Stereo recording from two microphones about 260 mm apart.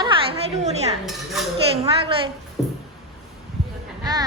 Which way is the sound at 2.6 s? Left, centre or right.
Centre.